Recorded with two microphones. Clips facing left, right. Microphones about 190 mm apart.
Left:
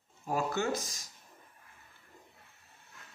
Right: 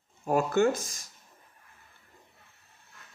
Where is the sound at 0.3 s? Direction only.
55° right (ahead or behind).